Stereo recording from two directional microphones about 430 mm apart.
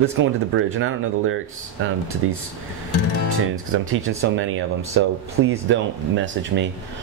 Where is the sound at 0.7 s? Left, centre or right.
Right.